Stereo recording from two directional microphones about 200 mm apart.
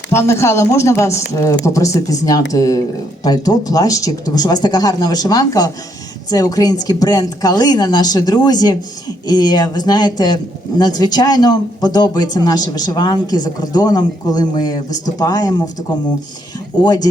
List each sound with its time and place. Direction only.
0.1 s a man's voice: 15° left (ahead or behind)
16.8 s a man's voice: 20° left (ahead or behind)